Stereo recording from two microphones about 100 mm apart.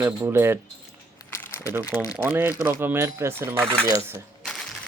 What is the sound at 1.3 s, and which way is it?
Crumpling, 30° left (ahead or behind).